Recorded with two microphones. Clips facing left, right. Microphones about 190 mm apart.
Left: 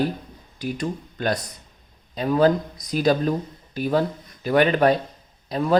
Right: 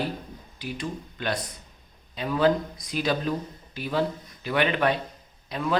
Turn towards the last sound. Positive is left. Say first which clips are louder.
# left 6 dB
turn(degrees=40)  # may be behind; listen again after turning